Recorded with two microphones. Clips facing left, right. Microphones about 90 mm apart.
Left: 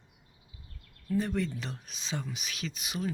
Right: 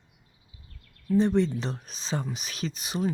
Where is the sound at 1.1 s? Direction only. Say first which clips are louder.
Right 8 dB; 25° right (ahead or behind).